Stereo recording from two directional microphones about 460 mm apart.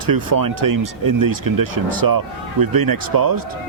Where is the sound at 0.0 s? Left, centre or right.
Right.